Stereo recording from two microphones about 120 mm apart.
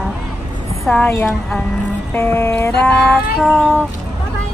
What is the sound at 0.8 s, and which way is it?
Vehicle, 10° left (ahead or behind).